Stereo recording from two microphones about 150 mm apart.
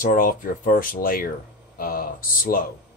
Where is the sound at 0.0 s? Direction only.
70° left (ahead or behind).